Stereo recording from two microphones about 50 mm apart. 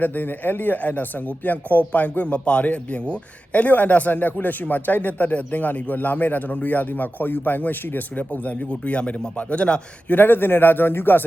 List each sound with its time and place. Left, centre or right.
0.0 s a man's voice: left
10.1 s speech: left